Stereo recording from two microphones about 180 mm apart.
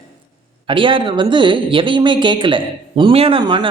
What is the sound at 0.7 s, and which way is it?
Speech, 30° right (ahead or behind).